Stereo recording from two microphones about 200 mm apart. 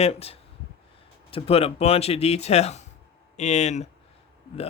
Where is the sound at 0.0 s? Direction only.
30° left (ahead or behind).